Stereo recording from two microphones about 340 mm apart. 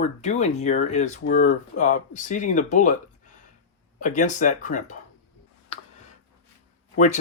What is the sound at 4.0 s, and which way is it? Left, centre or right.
Speech, left.